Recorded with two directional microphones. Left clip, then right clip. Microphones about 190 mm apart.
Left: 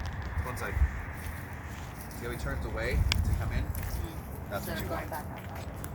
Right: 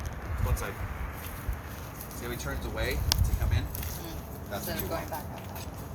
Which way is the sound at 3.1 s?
20° right (ahead or behind).